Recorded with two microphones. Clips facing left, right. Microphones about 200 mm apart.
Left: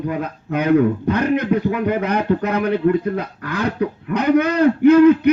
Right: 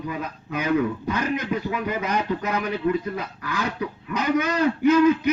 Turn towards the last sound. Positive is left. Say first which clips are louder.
# left 7 dB
turn(degrees=60)  # may be behind; listen again after turning